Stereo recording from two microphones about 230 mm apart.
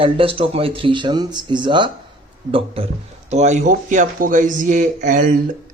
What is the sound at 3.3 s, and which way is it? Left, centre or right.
Speech, right.